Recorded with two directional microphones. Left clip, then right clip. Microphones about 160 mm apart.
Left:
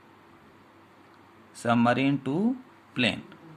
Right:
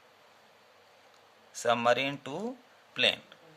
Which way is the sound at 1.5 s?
35° right (ahead or behind).